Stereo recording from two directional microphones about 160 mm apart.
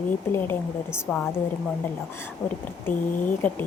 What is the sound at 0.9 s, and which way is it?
Speech, centre (ahead or behind).